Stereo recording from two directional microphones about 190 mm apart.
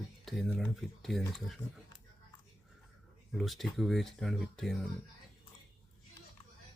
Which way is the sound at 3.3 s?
Centre (ahead or behind).